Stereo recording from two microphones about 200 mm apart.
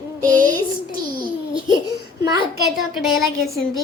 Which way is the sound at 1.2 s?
25° right (ahead or behind).